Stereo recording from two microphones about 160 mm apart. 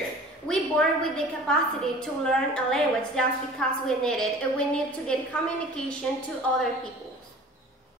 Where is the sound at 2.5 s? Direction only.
5° left (ahead or behind).